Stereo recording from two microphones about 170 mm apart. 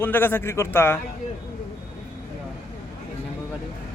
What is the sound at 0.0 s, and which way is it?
Speech, 10° left (ahead or behind).